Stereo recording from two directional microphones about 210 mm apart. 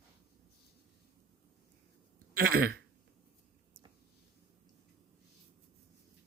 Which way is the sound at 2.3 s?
45° right (ahead or behind).